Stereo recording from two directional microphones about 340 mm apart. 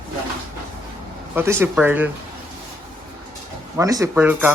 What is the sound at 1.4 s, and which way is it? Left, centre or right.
Speech, centre.